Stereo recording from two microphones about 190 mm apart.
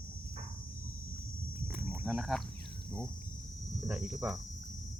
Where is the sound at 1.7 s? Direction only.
10° right (ahead or behind).